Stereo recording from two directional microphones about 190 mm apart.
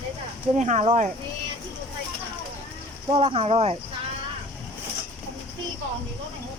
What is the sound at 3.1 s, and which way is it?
Speech, 30° right (ahead or behind).